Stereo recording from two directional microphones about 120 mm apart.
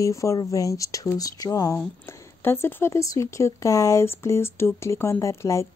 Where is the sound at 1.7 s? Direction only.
20° left (ahead or behind).